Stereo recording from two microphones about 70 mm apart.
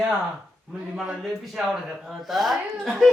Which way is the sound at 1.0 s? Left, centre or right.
Centre.